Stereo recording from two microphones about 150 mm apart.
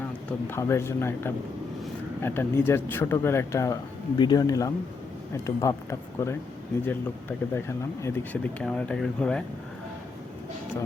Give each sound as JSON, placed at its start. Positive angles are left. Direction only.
{"t": 0.3, "sound": "speech", "side_deg": 15}